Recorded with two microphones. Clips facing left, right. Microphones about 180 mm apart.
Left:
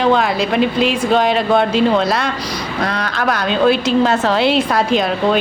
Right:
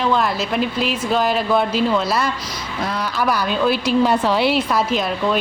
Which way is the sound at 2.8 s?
70° left (ahead or behind).